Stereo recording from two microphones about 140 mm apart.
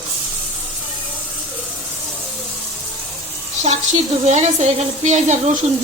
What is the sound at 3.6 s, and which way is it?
A woman's voice, 55° right (ahead or behind).